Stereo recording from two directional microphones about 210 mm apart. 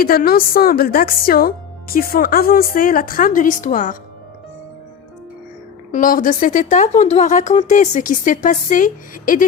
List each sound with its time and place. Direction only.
0.0 s speech: 45° left (ahead or behind)
5.9 s a woman's voice: 40° left (ahead or behind)